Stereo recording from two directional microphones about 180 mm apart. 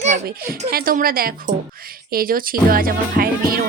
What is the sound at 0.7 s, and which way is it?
Speech, 55° right (ahead or behind).